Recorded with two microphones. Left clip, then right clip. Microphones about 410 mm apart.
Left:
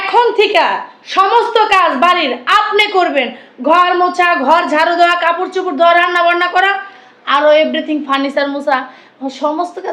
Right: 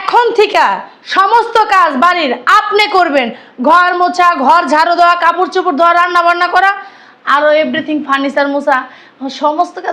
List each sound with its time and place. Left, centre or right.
0.1 s a woman's voice: right
7.3 s a woman's voice: right